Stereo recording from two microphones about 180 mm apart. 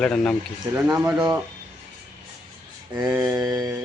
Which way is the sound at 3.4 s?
20° right (ahead or behind).